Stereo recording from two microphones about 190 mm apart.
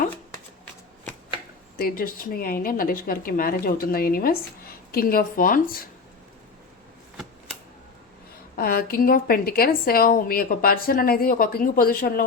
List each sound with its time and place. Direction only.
1.8 s a woman's voice: 50° left (ahead or behind)
8.5 s a woman's voice: 50° left (ahead or behind)